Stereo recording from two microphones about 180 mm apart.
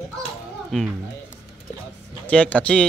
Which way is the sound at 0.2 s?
Centre (ahead or behind).